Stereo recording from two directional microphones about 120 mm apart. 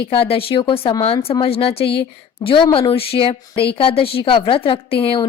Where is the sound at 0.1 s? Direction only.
50° left (ahead or behind).